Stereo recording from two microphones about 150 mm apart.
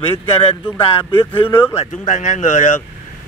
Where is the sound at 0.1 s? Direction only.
15° left (ahead or behind).